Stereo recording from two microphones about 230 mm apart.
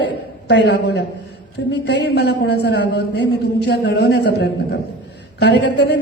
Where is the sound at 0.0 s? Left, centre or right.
Left.